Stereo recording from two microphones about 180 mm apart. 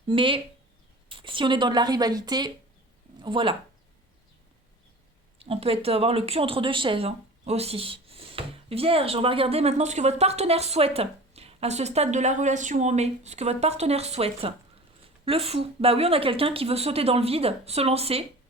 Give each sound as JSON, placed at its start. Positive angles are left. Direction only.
{"t": 0.1, "sound": "speech", "side_deg": -30}
{"t": 5.4, "sound": "speech", "side_deg": -35}